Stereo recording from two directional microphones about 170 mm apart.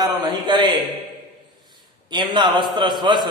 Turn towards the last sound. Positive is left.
turn(degrees=-25)  # may be behind; listen again after turning